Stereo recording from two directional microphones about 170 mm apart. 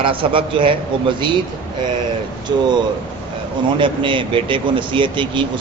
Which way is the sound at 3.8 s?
30° right (ahead or behind).